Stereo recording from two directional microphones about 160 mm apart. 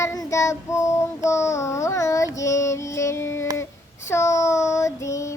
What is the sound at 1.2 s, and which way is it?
A child's voice, 20° left (ahead or behind).